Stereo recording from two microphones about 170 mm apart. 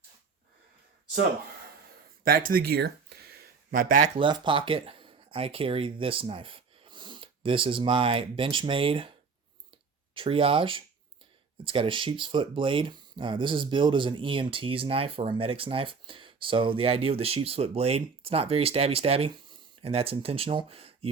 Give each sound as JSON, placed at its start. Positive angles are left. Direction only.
{"t": 2.2, "sound": "a sound", "side_deg": -60}
{"t": 4.2, "sound": "speech", "side_deg": -30}
{"t": 10.2, "sound": "speech", "side_deg": -30}